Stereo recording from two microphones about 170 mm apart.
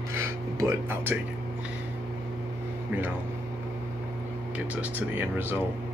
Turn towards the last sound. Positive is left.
turn(degrees=-10)  # may be behind; listen again after turning